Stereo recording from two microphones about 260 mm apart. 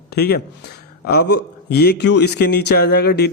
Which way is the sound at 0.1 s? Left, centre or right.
Left.